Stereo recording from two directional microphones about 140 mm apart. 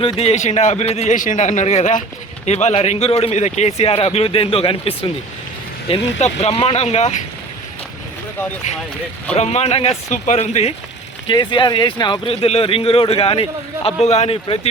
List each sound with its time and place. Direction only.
0.0 s a man's voice: 45° left (ahead or behind); by 2.0 s 65° left (ahead or behind)
2.5 s speech: 50° left (ahead or behind)
5.9 s speech: 50° left (ahead or behind)
9.3 s speech: 50° left (ahead or behind)
11.3 s speech: 35° left (ahead or behind)